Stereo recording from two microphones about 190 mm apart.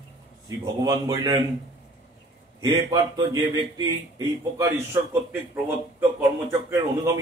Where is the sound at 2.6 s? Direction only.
20° right (ahead or behind).